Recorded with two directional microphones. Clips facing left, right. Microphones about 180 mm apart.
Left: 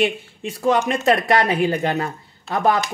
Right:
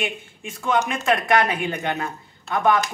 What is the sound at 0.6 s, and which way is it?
Speech, 35° left (ahead or behind).